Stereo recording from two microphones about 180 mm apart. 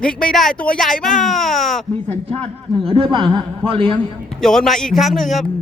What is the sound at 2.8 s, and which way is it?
A man's voice, 30° right (ahead or behind).